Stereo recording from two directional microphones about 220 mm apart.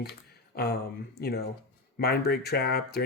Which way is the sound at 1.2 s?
45° left (ahead or behind).